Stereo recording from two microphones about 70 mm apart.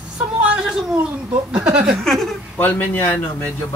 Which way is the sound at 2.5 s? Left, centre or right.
Left.